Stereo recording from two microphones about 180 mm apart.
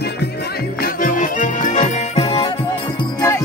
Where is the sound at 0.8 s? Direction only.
50° left (ahead or behind); by 2.5 s 30° left (ahead or behind).